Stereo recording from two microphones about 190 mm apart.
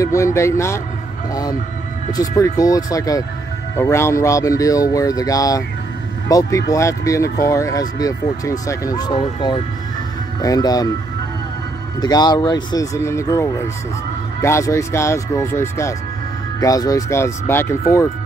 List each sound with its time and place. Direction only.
0.0 s speech: 15° left (ahead or behind)
12.0 s speech: 20° left (ahead or behind)